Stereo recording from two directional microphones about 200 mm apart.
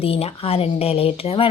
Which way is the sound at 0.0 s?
30° left (ahead or behind).